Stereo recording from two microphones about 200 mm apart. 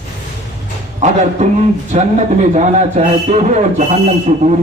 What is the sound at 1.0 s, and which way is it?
A man's voice, 35° right (ahead or behind).